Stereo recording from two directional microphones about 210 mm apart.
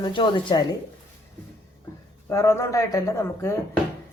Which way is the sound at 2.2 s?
15° left (ahead or behind).